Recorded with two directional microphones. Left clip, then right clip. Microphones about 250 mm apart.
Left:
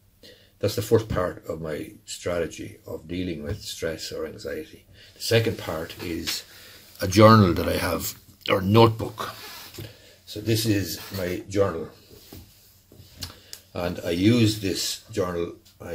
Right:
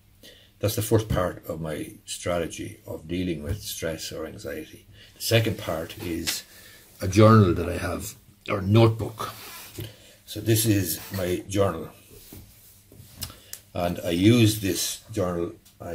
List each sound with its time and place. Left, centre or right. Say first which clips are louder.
0.2 s speech: left 2 dB; centre
7.0 s speech: left 3 dB; left
10.3 s speech: right 1 dB; centre
13.2 s speech: left 1 dB; centre